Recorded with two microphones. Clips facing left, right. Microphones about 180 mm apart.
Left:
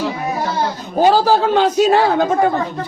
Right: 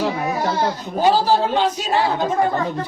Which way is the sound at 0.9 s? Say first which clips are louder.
Left 4 dB; 45° left (ahead or behind).